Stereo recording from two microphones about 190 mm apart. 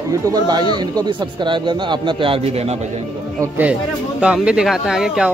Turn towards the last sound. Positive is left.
turn(degrees=0)  # may be behind; listen again after turning